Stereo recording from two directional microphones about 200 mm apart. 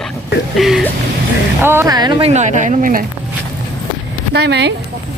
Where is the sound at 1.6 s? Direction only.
10° right (ahead or behind).